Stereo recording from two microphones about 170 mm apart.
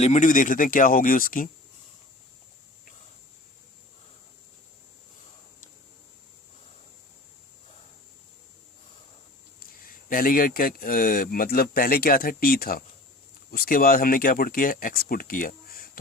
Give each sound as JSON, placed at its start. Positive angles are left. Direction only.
{"t": 0.0, "sound": "speech", "side_deg": 45}
{"t": 9.6, "sound": "speech", "side_deg": 55}